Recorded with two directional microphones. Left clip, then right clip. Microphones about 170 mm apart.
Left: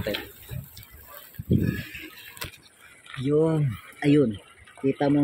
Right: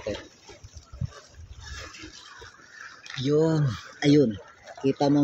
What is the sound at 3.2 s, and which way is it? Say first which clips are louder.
Speech: even; 5° left (ahead or behind).